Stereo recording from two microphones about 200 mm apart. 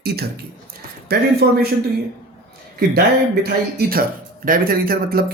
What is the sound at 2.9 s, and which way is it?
Speech, 50° right (ahead or behind).